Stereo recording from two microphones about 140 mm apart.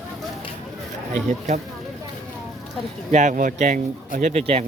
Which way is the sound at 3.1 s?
60° right (ahead or behind).